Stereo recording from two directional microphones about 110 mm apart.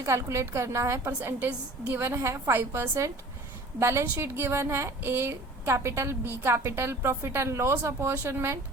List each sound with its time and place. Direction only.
0.0 s a woman's voice: 25° right (ahead or behind)